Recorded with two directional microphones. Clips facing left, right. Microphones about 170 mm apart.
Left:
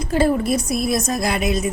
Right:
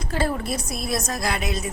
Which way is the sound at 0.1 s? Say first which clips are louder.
Left 8 dB; 15° left (ahead or behind).